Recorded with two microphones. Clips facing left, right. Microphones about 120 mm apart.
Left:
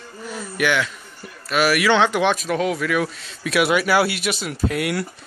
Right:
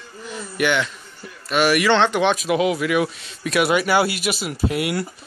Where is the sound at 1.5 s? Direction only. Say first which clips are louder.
Right 1 dB; centre (ahead or behind).